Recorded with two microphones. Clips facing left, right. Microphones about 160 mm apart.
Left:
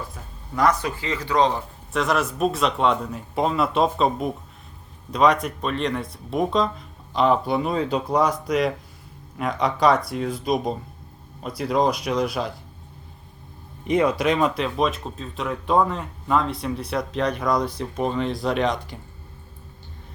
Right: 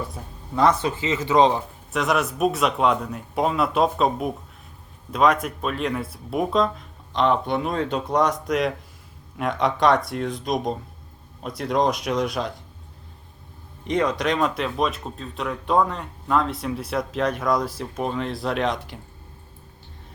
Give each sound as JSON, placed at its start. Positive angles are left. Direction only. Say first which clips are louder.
{"t": 0.5, "sound": "speech", "louder": "right 1 dB", "side_deg": -25}
{"t": 1.9, "sound": "speech", "louder": "even", "side_deg": 0}
{"t": 13.8, "sound": "speech", "louder": "left 2 dB", "side_deg": 10}